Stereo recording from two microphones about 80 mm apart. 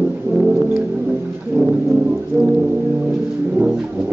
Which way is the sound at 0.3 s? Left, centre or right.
Centre.